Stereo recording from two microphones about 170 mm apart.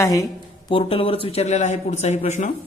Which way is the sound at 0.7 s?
35° left (ahead or behind).